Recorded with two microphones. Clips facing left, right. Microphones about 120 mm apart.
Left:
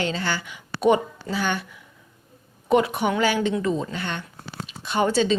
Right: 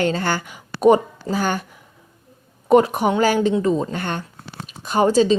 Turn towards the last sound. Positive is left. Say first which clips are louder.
# right 5 dB
turn(degrees=-35)  # may be behind; listen again after turning